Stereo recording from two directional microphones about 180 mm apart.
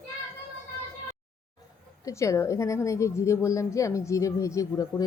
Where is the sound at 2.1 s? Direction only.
15° left (ahead or behind).